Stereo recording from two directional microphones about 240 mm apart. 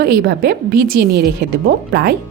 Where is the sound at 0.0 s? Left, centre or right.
Right.